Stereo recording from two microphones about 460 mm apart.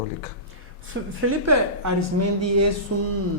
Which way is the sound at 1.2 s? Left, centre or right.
Right.